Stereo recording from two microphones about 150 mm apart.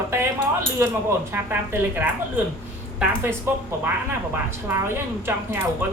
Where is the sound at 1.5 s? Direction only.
15° right (ahead or behind).